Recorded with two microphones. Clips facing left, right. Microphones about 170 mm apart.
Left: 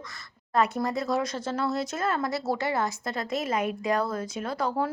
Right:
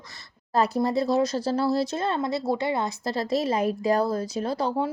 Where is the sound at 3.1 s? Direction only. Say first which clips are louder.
Right 4 dB; 30° right (ahead or behind).